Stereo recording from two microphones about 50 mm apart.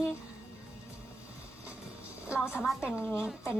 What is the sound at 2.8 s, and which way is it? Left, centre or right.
Speech, right.